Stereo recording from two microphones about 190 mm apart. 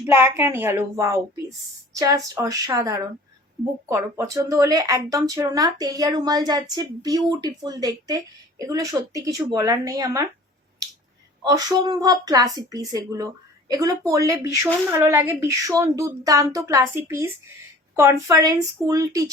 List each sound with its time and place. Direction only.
0.0 s speech: 10° right (ahead or behind)
11.4 s speech: 20° right (ahead or behind)